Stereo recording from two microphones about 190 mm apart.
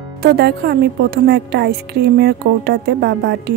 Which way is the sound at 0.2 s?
55° right (ahead or behind).